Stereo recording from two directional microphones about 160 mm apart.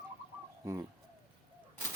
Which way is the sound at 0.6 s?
15° right (ahead or behind).